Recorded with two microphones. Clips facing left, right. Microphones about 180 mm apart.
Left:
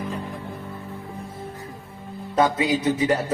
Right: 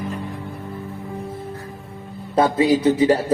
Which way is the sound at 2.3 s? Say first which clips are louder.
Right 4 dB; 30° right (ahead or behind).